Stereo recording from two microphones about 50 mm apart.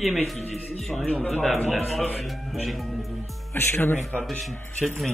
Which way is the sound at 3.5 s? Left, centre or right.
Left.